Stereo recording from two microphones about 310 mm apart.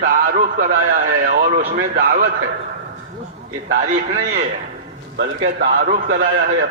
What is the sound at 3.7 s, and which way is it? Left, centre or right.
Speech, right.